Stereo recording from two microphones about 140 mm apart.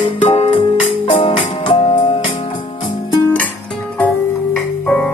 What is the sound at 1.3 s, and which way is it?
Keyboard, 35° left (ahead or behind).